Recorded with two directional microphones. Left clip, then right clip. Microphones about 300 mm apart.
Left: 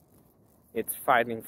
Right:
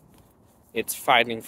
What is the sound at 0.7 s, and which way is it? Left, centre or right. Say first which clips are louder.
Speech: right 4 dB; centre.